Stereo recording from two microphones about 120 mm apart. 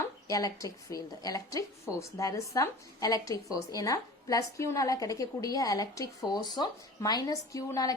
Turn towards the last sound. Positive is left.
turn(degrees=30)  # may be behind; listen again after turning